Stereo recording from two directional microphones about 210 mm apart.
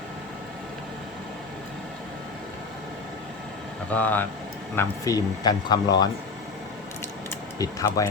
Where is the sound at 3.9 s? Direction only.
10° left (ahead or behind).